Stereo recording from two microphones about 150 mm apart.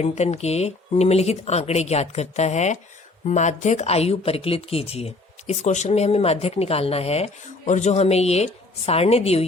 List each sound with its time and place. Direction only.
0.0 s speech: 45° left (ahead or behind)